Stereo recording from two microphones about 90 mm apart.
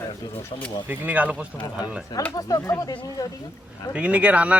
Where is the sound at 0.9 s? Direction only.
15° right (ahead or behind).